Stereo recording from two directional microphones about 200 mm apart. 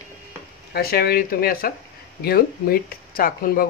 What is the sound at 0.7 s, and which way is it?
Speech, 50° left (ahead or behind).